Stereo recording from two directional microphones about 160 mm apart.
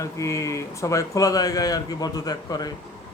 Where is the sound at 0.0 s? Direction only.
20° left (ahead or behind).